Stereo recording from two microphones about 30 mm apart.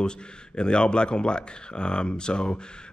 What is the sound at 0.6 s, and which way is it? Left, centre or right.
Speech, left.